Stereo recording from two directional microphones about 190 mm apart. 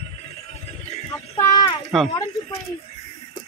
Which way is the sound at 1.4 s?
20° left (ahead or behind).